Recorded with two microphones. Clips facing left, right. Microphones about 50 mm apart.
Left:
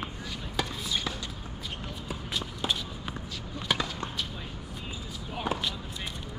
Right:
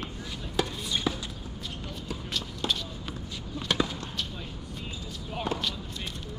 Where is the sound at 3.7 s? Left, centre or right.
Centre.